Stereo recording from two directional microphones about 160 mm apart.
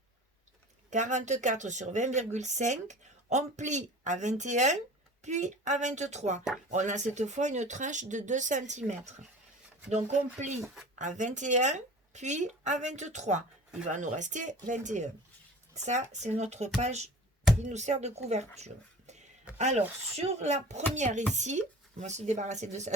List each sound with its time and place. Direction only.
0.9 s speech: 50° right (ahead or behind)